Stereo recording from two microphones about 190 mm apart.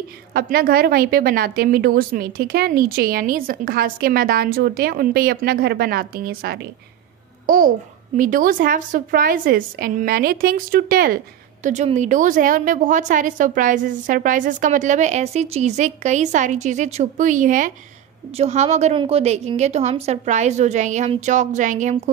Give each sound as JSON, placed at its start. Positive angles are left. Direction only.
{"t": 0.3, "sound": "a woman's voice", "side_deg": -50}
{"t": 7.4, "sound": "a child's voice", "side_deg": -45}
{"t": 11.6, "sound": "a woman's voice", "side_deg": -35}